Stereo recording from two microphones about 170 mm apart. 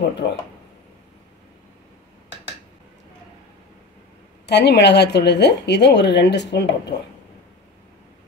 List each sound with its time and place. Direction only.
0.2 s speech: 90° left
4.5 s a woman's voice: 80° left